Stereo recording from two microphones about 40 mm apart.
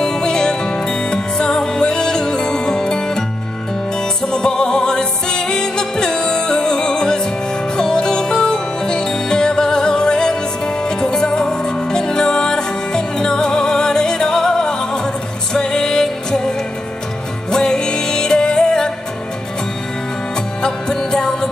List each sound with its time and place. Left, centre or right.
0.0 s music: centre
20.6 s music: centre